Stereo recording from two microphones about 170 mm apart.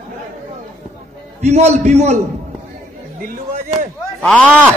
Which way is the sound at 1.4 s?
40° right (ahead or behind).